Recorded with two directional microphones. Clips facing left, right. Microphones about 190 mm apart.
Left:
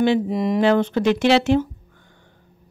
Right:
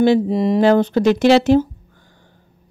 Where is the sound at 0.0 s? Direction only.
35° right (ahead or behind).